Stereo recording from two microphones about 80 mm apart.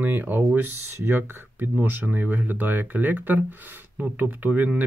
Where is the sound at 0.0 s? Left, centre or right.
Right.